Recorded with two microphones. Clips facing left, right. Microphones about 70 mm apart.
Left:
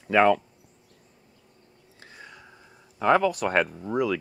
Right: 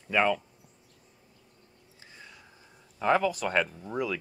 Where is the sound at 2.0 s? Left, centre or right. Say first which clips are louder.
Left 5 dB; left.